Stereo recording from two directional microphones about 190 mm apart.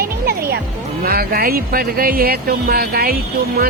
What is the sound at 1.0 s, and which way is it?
Speech, 50° right (ahead or behind).